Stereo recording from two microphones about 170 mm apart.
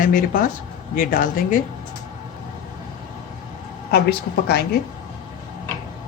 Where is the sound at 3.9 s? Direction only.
70° left (ahead or behind).